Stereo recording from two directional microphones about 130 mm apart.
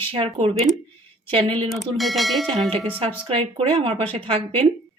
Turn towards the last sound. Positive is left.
turn(degrees=-45)  # may be behind; listen again after turning